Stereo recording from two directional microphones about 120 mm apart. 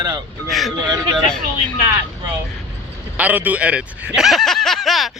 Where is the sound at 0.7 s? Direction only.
35° right (ahead or behind).